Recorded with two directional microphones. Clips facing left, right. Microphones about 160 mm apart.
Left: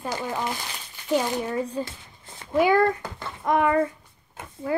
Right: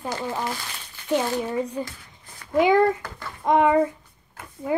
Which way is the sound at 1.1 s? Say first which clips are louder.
Right 1 dB; 15° left (ahead or behind).